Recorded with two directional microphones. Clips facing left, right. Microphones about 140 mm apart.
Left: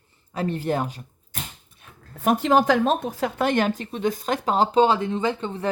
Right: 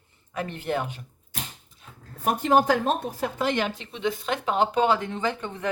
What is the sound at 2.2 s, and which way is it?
Speech, 90° left.